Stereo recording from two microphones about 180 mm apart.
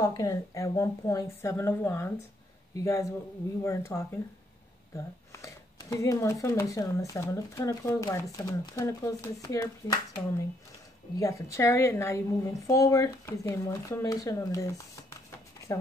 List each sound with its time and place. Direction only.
0.0 s speech: 20° left (ahead or behind)